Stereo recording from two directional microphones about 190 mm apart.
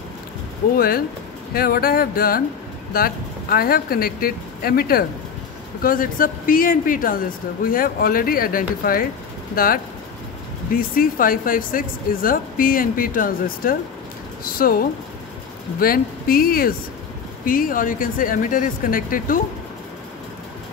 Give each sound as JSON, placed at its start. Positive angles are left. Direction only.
{"t": 0.7, "sound": "speech", "side_deg": 50}